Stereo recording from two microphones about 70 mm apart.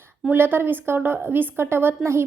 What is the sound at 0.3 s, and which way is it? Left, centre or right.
A woman's voice, right.